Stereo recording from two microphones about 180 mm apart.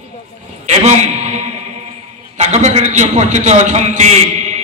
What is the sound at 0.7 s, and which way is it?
Speech, 40° right (ahead or behind).